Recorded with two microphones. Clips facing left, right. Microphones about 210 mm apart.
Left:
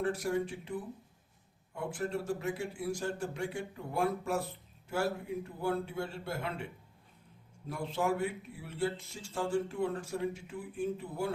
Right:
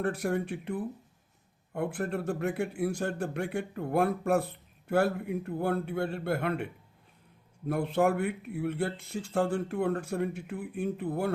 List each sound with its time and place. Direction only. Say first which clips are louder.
0.0 s speech: right 2 dB; 60° right (ahead or behind)
7.7 s speech: right 6 dB; 60° right (ahead or behind)